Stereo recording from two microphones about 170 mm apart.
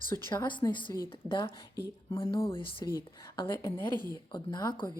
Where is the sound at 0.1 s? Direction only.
20° left (ahead or behind).